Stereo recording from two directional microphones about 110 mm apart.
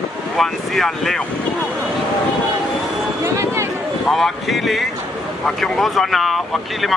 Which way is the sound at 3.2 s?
25° right (ahead or behind).